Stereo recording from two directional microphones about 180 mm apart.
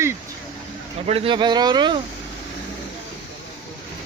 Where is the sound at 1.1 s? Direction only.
30° right (ahead or behind).